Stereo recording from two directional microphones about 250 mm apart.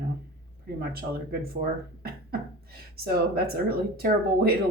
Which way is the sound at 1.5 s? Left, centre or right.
Right.